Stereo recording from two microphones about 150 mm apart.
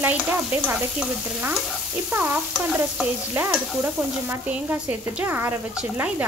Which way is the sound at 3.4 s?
15° right (ahead or behind).